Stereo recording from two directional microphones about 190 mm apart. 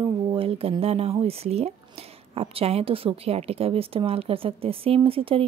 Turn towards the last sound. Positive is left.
turn(degrees=-30)  # may be behind; listen again after turning